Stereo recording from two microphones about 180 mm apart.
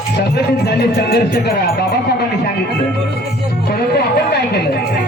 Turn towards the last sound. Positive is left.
turn(degrees=60)  # may be behind; listen again after turning